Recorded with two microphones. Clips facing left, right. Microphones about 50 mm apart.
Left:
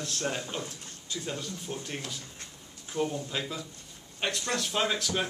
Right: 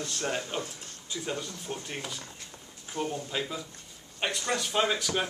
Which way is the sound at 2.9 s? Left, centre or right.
Right.